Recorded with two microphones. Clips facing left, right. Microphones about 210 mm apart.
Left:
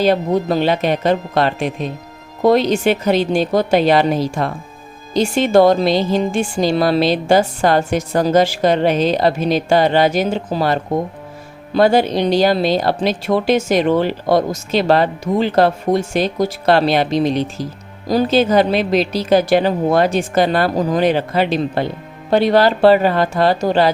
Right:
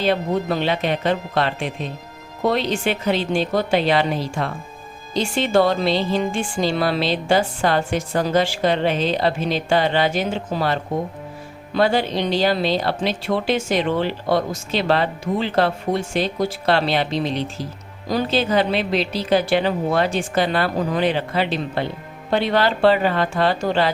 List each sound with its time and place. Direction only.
0.0 s speech: 40° left (ahead or behind)